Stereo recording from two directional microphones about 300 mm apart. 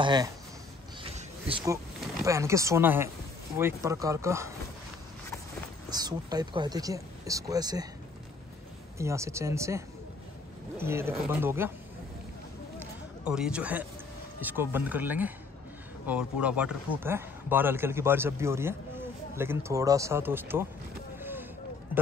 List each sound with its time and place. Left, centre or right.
0.0 s speech: centre
1.0 s a sound: centre
2.2 s speech: centre
5.9 s speech: centre
8.9 s speech: centre
13.2 s speech: centre
21.2 s vehicle: centre